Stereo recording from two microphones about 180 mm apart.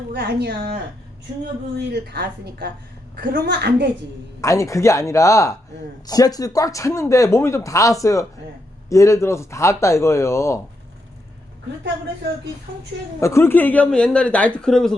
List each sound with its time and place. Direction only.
0.1 s speech: 65° right (ahead or behind)
1.9 s speech: 65° right (ahead or behind)
4.4 s speech: 20° left (ahead or behind)
13.1 s speech: 15° left (ahead or behind)